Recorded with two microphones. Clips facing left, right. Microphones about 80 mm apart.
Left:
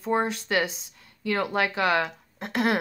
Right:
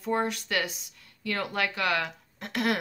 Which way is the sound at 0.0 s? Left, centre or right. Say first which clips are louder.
Left 3 dB; left.